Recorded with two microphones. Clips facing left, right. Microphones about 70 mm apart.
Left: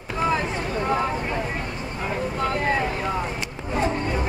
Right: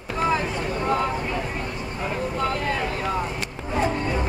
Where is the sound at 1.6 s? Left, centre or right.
Left.